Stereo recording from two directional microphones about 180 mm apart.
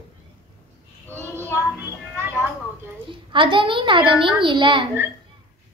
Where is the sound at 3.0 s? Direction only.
25° right (ahead or behind).